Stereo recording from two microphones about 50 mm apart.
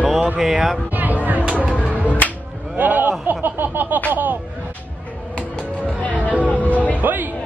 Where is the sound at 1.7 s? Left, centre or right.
Left.